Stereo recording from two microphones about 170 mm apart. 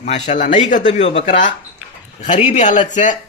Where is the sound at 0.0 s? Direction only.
45° left (ahead or behind).